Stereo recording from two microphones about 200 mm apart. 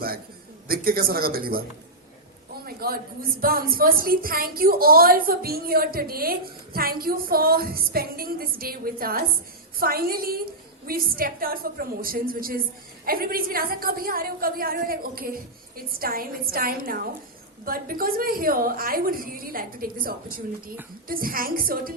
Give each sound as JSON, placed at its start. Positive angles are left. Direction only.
{"t": 0.7, "sound": "a woman's voice", "side_deg": -50}
{"t": 2.6, "sound": "a woman's voice", "side_deg": -50}